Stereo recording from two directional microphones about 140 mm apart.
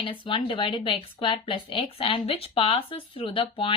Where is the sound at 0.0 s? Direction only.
35° left (ahead or behind).